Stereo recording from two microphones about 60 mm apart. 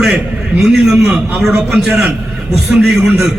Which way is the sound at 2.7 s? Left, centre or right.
Centre.